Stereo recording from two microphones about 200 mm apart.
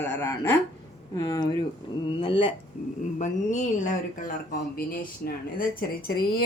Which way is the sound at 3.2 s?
40° left (ahead or behind).